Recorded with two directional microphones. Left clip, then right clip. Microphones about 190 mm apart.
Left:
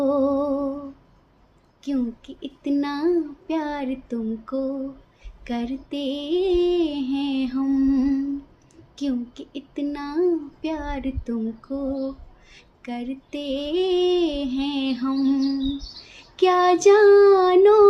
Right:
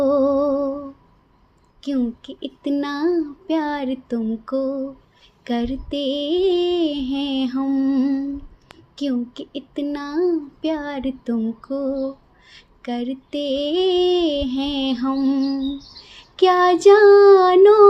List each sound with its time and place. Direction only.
0.0 s humming: 25° right (ahead or behind)
1.8 s female singing: 25° right (ahead or behind)